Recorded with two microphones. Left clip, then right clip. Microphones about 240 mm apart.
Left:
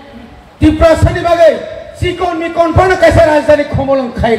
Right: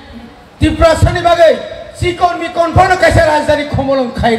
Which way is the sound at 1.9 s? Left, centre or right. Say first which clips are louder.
Right 2 dB; right.